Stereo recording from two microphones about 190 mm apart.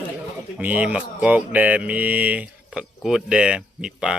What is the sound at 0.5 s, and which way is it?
Speech, 10° right (ahead or behind).